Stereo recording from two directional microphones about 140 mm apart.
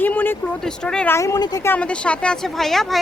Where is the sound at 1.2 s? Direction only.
25° left (ahead or behind).